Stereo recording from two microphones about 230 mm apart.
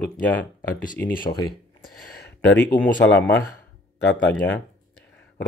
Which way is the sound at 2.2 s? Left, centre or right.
Left.